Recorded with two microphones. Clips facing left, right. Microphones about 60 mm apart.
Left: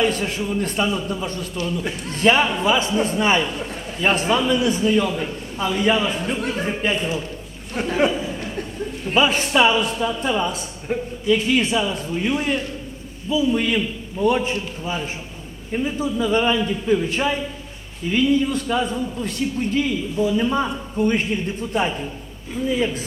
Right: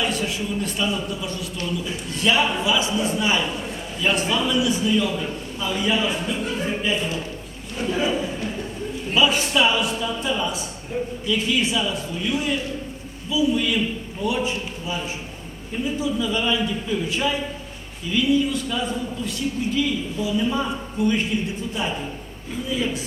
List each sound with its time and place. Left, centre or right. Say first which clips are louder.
0.0 s a man's voice: left 4 dB; left
7.8 s a sound: left 3 dB; left
9.1 s a man's voice: left 2 dB; left